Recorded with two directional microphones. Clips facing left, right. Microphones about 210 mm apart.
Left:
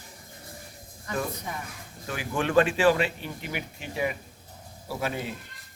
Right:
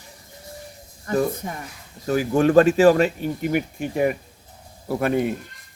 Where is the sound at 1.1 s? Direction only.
45° right (ahead or behind).